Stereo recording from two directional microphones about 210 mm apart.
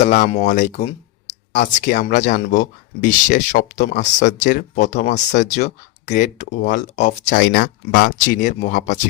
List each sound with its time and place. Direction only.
0.0 s speech: 35° left (ahead or behind)